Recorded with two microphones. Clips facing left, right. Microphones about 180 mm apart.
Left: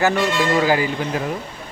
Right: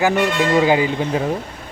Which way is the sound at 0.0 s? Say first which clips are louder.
Right 1 dB; 15° right (ahead or behind).